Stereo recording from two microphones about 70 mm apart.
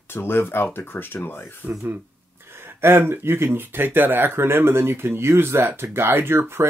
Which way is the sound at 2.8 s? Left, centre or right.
Right.